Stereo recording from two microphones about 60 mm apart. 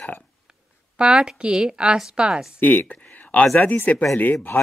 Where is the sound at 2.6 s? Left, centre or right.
Left.